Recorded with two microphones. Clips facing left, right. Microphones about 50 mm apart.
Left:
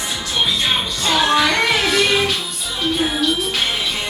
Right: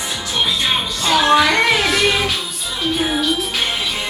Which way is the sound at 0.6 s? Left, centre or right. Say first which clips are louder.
Even; centre.